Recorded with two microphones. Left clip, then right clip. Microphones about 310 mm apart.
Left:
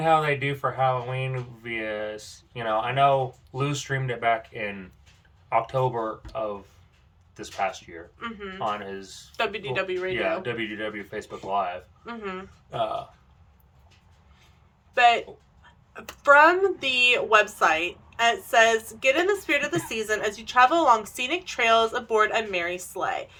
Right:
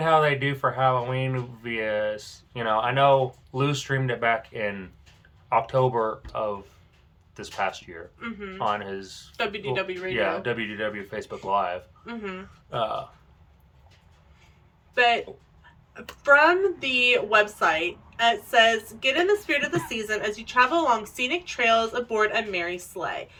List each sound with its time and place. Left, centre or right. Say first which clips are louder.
0.0 s speech: right 1 dB; centre
8.2 s a woman's voice: left 1 dB; centre
8.7 s speech: right 3 dB; centre
9.3 s a woman's voice: even; centre
10.1 s speech: right 1 dB; centre
12.0 s a woman's voice: left 5 dB; centre
14.9 s a woman's voice: left 2 dB; centre